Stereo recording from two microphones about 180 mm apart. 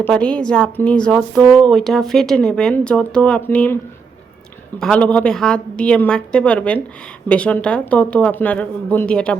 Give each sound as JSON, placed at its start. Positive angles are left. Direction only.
{"t": 0.0, "sound": "speech", "side_deg": 5}
{"t": 4.8, "sound": "speech", "side_deg": 5}